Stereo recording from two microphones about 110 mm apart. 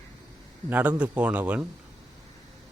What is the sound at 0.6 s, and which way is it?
A man's voice, 15° right (ahead or behind).